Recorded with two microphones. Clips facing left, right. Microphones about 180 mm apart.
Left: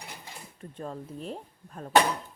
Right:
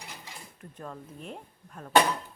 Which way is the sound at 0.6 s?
30° left (ahead or behind).